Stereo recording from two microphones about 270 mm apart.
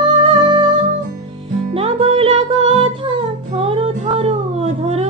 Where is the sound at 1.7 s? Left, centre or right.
Centre.